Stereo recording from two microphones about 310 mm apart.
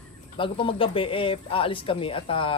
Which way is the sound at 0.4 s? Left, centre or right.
Centre.